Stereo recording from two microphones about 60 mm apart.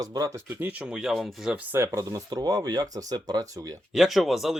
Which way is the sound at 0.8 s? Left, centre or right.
Centre.